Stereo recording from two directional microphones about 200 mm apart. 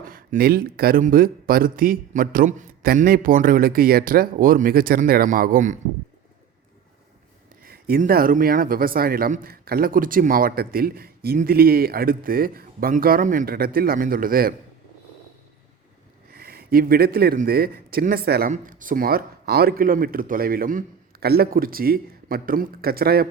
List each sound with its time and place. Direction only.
0.0 s speech: 45° right (ahead or behind)
7.6 s speech: 45° right (ahead or behind)
16.3 s a man's voice: 50° right (ahead or behind)